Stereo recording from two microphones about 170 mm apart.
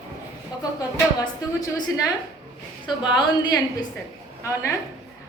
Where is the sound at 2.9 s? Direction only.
25° left (ahead or behind).